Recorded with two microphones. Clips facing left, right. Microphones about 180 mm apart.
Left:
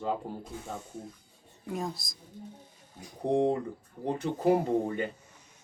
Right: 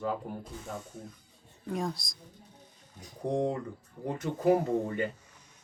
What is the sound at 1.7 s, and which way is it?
Speech, centre (ahead or behind).